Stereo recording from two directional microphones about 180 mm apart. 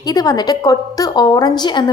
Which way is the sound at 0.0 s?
20° left (ahead or behind).